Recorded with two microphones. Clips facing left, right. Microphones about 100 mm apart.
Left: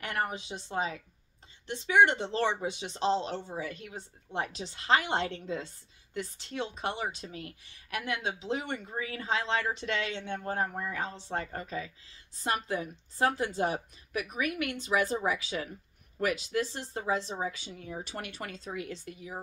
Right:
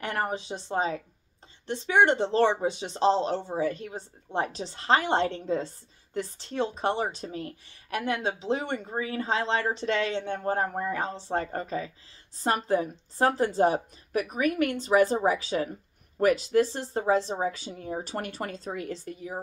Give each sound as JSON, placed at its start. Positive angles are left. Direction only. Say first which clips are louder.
{"t": 0.0, "sound": "a woman's voice", "louder": "right 4 dB", "side_deg": -30}